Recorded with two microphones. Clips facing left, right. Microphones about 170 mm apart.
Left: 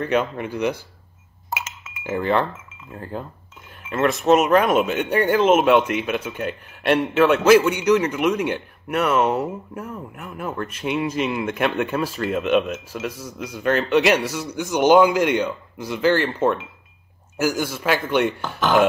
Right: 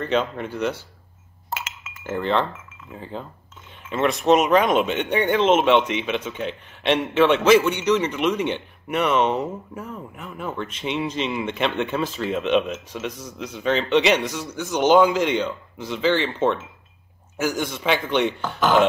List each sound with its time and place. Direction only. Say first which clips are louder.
0.0 s speech: left 1 dB; 10° left (ahead or behind)
1.5 s chink: left 1 dB; 10° left (ahead or behind)
2.9 s speech: left 2 dB; 5° left (ahead or behind)